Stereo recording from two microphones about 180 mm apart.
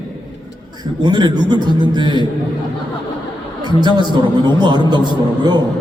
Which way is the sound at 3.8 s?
25° right (ahead or behind).